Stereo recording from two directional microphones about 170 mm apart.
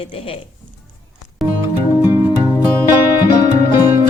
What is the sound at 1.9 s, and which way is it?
Music, 25° left (ahead or behind).